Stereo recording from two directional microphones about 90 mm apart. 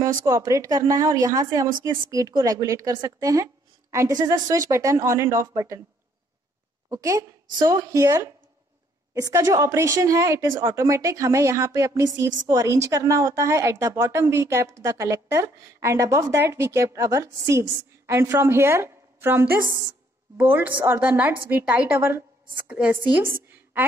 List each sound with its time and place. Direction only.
0.0 s a woman's voice: 40° right (ahead or behind)
6.9 s a woman's voice: 40° right (ahead or behind); by 23.9 s 20° right (ahead or behind)